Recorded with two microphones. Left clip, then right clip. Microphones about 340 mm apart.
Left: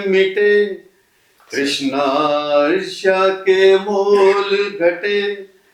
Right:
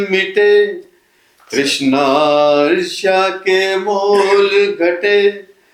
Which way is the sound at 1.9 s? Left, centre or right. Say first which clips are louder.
Right 5 dB; right.